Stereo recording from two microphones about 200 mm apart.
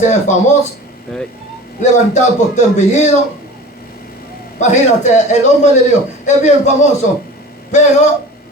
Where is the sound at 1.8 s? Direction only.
35° left (ahead or behind).